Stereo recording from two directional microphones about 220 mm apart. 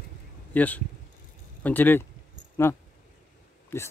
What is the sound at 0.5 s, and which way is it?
Speech, 5° left (ahead or behind).